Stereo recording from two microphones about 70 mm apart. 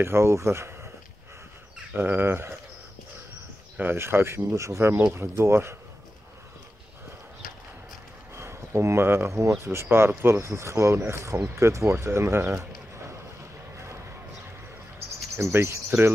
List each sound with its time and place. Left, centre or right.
0.0 s speech: right
2.0 s speech: right
3.7 s speech: right
8.4 s a sound: right
9.7 s speech: right
15.3 s speech: right